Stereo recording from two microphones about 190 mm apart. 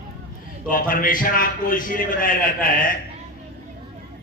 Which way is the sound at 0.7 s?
45° left (ahead or behind).